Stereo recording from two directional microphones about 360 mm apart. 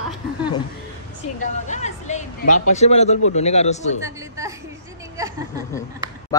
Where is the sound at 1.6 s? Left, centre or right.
Centre.